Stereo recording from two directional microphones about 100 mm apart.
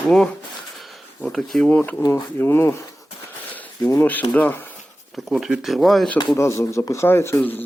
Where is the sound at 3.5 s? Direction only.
15° left (ahead or behind).